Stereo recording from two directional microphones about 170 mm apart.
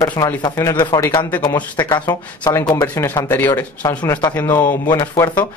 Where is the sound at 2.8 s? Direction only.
15° left (ahead or behind).